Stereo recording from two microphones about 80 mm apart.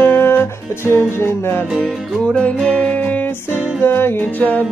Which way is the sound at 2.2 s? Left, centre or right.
Centre.